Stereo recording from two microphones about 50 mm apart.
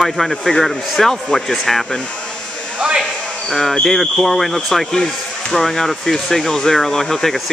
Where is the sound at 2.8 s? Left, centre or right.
Centre.